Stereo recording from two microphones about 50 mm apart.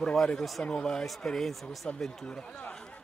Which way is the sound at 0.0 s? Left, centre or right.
Centre.